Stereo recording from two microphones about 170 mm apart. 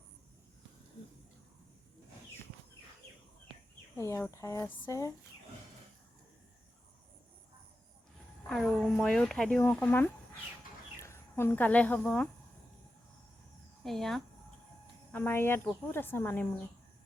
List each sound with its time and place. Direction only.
3.9 s speech: 15° left (ahead or behind)
8.4 s a woman's voice: 5° left (ahead or behind)
13.8 s speech: centre (ahead or behind)
15.1 s a woman's voice: 10° left (ahead or behind)